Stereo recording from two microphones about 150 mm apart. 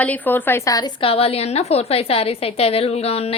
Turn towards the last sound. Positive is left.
turn(degrees=40)  # may be behind; listen again after turning